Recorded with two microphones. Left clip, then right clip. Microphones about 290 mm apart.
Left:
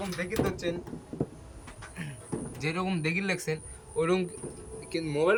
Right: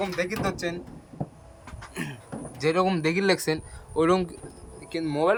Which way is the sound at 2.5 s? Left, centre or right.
Centre.